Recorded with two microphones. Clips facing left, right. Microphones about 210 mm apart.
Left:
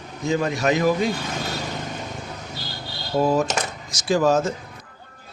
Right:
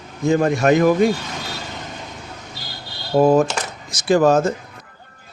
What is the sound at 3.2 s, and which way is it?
Speech, 50° right (ahead or behind).